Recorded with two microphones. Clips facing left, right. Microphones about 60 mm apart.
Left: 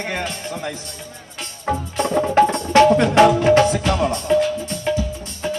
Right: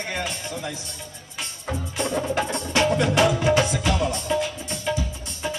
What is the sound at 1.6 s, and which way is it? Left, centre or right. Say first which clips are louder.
Music: left 7 dB; left.